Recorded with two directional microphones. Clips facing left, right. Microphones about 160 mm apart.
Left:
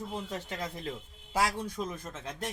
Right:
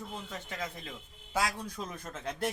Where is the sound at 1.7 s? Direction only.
Centre (ahead or behind).